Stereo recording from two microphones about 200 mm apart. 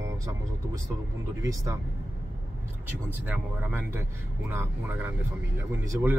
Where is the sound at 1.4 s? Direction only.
15° right (ahead or behind).